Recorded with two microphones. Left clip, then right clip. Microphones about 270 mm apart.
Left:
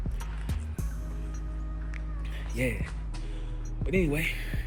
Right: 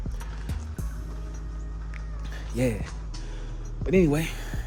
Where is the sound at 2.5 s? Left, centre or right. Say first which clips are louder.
Right 4 dB; centre.